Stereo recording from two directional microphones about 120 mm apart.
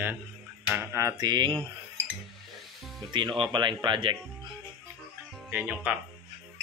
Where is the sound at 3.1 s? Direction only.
40° right (ahead or behind).